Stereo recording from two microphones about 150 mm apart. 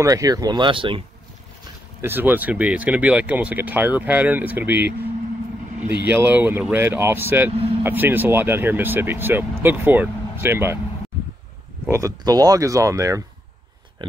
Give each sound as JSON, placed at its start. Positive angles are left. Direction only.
{"t": 0.0, "sound": "speech", "side_deg": -20}
{"t": 2.0, "sound": "speech", "side_deg": -15}
{"t": 11.8, "sound": "speech", "side_deg": -20}